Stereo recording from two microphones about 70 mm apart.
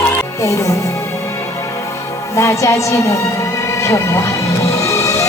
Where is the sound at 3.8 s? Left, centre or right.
Left.